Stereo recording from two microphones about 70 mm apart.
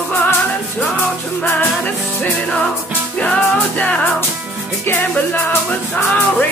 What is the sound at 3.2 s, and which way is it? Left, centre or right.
Music, centre.